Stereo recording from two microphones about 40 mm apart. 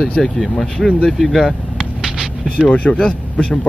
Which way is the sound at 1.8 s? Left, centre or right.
Centre.